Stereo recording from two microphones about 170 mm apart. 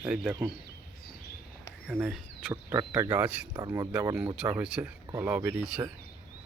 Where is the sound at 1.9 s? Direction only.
5° right (ahead or behind).